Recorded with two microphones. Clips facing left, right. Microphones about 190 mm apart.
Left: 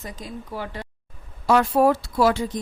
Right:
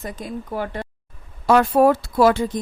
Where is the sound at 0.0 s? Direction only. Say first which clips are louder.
Right 5 dB; 55° right (ahead or behind).